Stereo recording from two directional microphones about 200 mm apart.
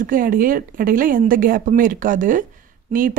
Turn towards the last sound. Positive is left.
turn(degrees=-40)  # may be behind; listen again after turning